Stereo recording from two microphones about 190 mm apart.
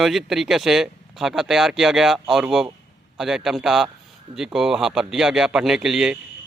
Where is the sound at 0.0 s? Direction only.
Centre (ahead or behind).